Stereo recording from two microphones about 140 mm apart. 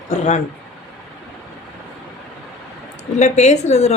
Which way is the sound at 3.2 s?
55° left (ahead or behind).